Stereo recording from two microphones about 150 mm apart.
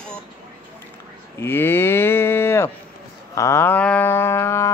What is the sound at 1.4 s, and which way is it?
Cattle, 15° left (ahead or behind).